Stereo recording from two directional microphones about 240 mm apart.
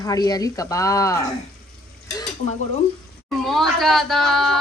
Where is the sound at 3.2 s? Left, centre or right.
Centre.